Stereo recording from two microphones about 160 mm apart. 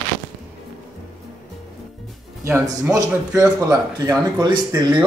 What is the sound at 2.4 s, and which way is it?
A man's voice, 15° right (ahead or behind).